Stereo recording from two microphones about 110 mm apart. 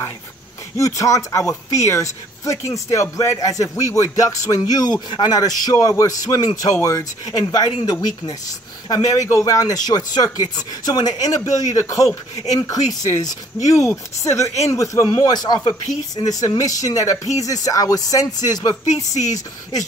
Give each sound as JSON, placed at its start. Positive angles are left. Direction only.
{"t": 0.7, "sound": "speech", "side_deg": 30}